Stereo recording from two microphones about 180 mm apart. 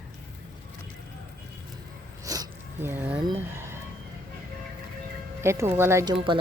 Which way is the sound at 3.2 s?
15° right (ahead or behind).